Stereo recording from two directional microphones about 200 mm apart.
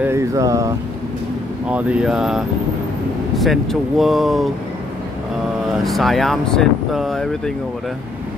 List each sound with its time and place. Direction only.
0.0 s speech: 15° right (ahead or behind)
5.9 s speech: centre (ahead or behind)